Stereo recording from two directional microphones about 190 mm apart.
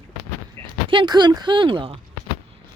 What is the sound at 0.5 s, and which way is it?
Speech, 25° right (ahead or behind).